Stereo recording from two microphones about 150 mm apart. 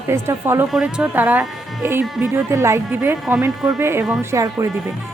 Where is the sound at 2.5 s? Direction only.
20° right (ahead or behind).